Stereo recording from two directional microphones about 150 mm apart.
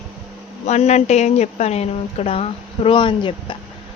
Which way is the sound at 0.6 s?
45° left (ahead or behind).